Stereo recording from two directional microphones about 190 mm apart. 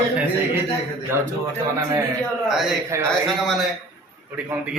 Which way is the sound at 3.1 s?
Centre (ahead or behind).